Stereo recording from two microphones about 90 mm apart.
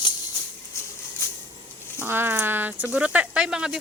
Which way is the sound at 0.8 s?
30° left (ahead or behind).